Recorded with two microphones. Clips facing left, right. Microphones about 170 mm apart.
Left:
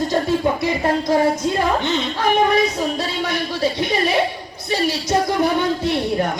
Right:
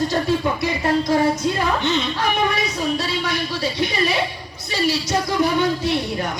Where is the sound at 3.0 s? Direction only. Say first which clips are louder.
Left 1 dB; 50° left (ahead or behind).